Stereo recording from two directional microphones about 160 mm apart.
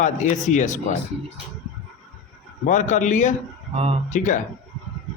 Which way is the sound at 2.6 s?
50° left (ahead or behind).